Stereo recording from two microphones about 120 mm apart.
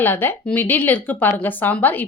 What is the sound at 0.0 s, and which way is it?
A woman's voice, 15° left (ahead or behind).